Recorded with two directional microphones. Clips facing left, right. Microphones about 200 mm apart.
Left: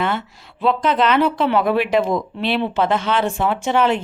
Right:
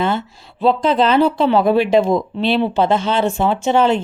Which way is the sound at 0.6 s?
30° right (ahead or behind).